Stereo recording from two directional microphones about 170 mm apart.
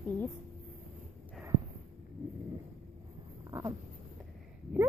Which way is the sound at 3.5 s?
20° right (ahead or behind).